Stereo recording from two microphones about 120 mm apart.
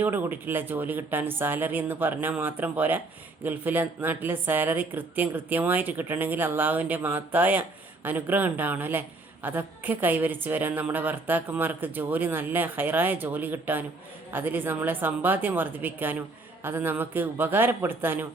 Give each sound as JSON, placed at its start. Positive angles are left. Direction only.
{"t": 0.0, "sound": "a woman's voice", "side_deg": -15}